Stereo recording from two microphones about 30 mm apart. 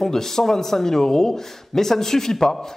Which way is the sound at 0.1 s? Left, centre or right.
Centre.